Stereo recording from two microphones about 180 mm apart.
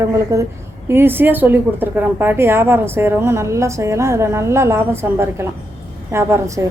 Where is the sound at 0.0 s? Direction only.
15° right (ahead or behind).